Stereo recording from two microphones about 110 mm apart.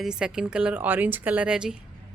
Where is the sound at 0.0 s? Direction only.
5° right (ahead or behind).